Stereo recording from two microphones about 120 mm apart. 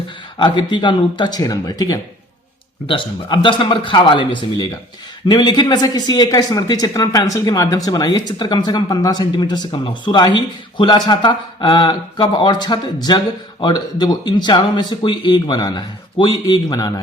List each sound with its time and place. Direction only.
0.3 s speech: 40° left (ahead or behind)
2.8 s a man's voice: 45° left (ahead or behind)